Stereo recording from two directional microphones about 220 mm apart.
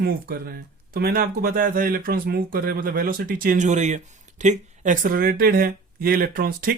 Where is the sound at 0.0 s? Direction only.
45° right (ahead or behind).